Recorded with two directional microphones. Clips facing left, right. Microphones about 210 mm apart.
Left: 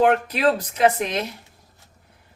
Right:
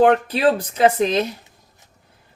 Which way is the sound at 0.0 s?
30° right (ahead or behind).